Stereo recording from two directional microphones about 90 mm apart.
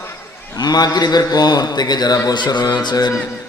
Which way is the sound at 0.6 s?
50° left (ahead or behind).